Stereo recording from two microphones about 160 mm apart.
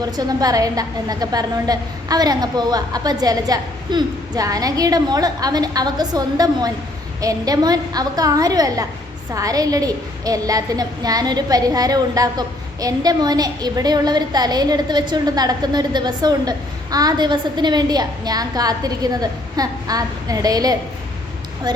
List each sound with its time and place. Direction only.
0.0 s a woman's voice: 25° right (ahead or behind)